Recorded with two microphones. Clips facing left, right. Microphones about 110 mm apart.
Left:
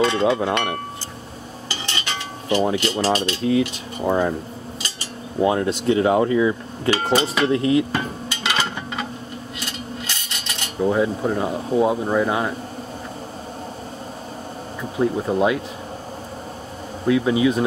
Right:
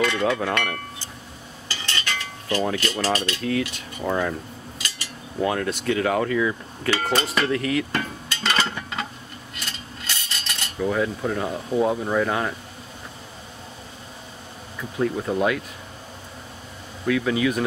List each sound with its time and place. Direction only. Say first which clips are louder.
0.0 s speech: left 4 dB; 25° left (ahead or behind)
1.7 s cutlery: left 1 dB; 20° left (ahead or behind)
5.4 s speech: left 5 dB; 20° left (ahead or behind)
8.5 s a sound: even; 10° left (ahead or behind)
10.0 s a sound: left 1 dB; 5° left (ahead or behind)
10.8 s speech: left 4 dB; 20° left (ahead or behind)
14.8 s speech: left 3 dB; 20° left (ahead or behind)
17.0 s speech: left 4 dB; 25° left (ahead or behind)